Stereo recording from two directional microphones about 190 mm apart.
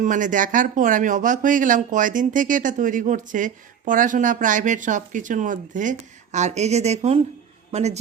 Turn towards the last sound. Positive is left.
turn(degrees=-35)  # may be behind; listen again after turning